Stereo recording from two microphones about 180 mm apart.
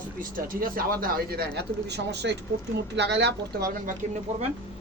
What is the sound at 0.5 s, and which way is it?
Speech, 50° right (ahead or behind).